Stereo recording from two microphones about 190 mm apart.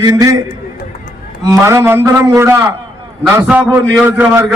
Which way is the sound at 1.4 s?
15° right (ahead or behind).